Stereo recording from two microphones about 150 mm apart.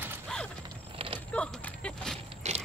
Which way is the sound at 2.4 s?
45° right (ahead or behind).